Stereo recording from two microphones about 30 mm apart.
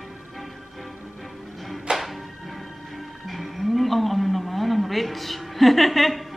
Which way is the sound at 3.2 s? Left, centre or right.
Centre.